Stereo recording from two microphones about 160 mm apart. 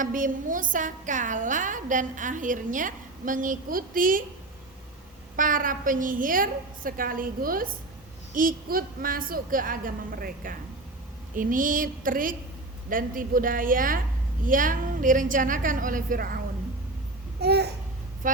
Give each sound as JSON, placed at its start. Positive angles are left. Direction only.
{"t": 0.0, "sound": "a woman's voice", "side_deg": -55}
{"t": 5.4, "sound": "a woman's voice", "side_deg": -60}
{"t": 17.4, "sound": "babbling", "side_deg": -90}